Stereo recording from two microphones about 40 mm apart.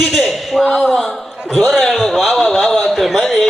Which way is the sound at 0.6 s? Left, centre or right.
Centre.